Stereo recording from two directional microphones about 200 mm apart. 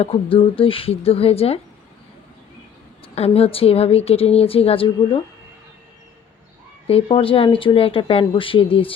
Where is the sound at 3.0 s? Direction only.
30° left (ahead or behind).